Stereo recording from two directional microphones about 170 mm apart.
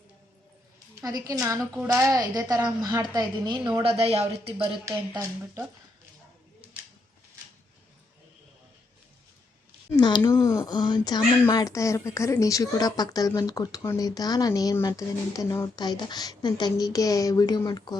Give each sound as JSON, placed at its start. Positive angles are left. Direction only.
{"t": 1.0, "sound": "a woman's voice", "side_deg": -20}
{"t": 3.8, "sound": "speech", "side_deg": -35}
{"t": 4.9, "sound": "speech", "side_deg": -10}
{"t": 9.9, "sound": "speech", "side_deg": 25}